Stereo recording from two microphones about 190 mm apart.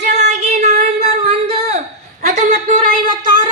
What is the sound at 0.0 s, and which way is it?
Child singing, 35° right (ahead or behind).